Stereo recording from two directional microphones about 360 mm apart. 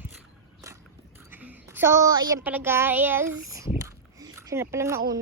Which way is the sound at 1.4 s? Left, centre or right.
Centre.